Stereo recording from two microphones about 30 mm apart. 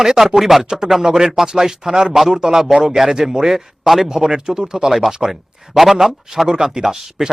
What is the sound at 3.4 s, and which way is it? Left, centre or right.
Speech, centre.